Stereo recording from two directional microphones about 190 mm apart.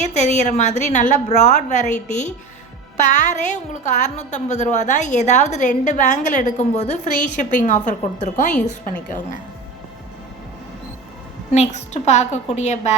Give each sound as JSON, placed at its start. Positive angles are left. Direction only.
{"t": 0.0, "sound": "a woman's voice", "side_deg": 40}
{"t": 11.5, "sound": "a woman's voice", "side_deg": 35}